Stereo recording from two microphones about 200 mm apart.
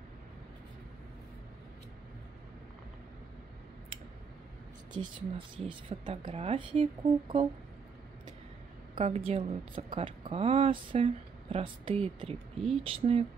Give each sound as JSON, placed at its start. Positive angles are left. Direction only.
{"t": 5.7, "sound": "speech", "side_deg": -25}
{"t": 8.9, "sound": "speech", "side_deg": -30}
{"t": 12.5, "sound": "speech", "side_deg": 0}
{"t": 12.8, "sound": "speech", "side_deg": -25}